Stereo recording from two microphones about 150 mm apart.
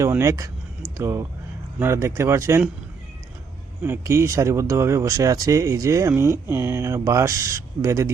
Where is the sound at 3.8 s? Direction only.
15° right (ahead or behind).